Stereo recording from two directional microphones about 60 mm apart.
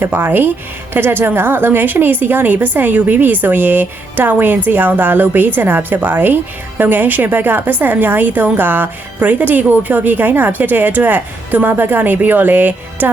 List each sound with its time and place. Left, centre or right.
0.0 s a woman's voice: right